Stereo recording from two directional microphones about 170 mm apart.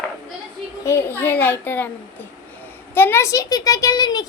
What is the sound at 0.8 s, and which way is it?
A woman's voice, 15° left (ahead or behind).